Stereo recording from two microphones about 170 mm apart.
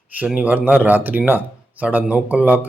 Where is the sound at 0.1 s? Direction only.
10° right (ahead or behind).